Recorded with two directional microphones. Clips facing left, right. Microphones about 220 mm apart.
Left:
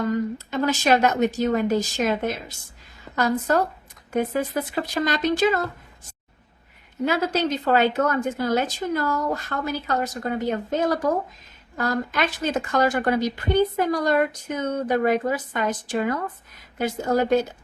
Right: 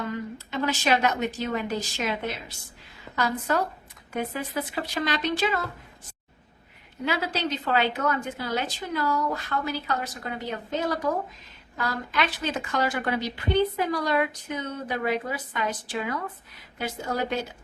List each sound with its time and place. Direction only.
0.0 s a woman's voice: 45° left (ahead or behind)
7.0 s a woman's voice: 45° left (ahead or behind)